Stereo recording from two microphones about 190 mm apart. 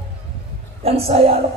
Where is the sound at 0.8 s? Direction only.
30° right (ahead or behind).